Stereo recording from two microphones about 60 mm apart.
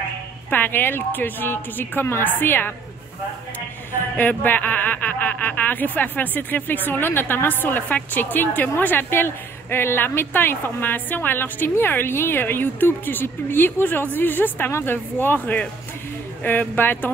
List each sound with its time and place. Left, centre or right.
0.5 s speech: left
4.2 s speech: left
14.7 s a woman's voice: left
15.1 s speech: left